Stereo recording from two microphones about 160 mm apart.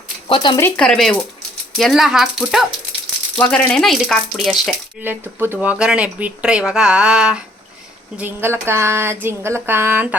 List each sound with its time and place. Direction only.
0.3 s speech: 35° left (ahead or behind)
0.8 s speech: centre (ahead or behind)
5.0 s speech: 15° right (ahead or behind)